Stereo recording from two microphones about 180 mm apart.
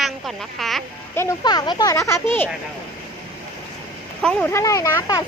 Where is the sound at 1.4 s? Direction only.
25° left (ahead or behind).